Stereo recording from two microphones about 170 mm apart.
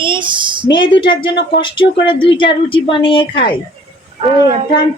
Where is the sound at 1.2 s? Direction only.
90° left.